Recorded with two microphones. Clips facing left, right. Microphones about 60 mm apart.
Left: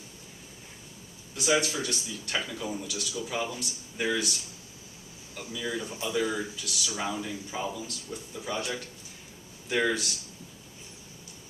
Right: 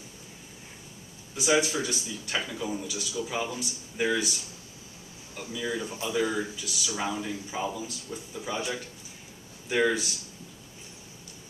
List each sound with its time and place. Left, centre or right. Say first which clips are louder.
1.3 s speech: right 2 dB; centre